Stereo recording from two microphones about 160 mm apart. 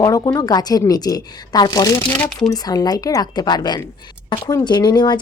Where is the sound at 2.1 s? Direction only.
10° left (ahead or behind).